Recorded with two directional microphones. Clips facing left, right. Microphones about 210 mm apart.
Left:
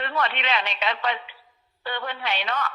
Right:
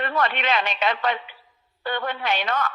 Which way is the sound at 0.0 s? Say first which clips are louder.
Right 3 dB; 45° right (ahead or behind).